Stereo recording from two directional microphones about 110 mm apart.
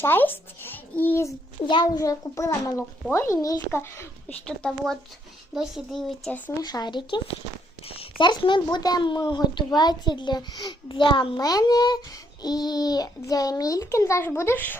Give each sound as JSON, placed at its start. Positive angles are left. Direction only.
{"t": 0.0, "sound": "speech", "side_deg": 20}
{"t": 1.6, "sound": "a woman's voice", "side_deg": 45}
{"t": 2.0, "sound": "a child's voice", "side_deg": 30}
{"t": 4.4, "sound": "speech", "side_deg": 5}
{"t": 6.5, "sound": "a child's voice", "side_deg": 35}
{"t": 7.9, "sound": "speech", "side_deg": 60}
{"t": 8.3, "sound": "a woman's voice", "side_deg": 45}
{"t": 11.3, "sound": "a child's voice", "side_deg": 35}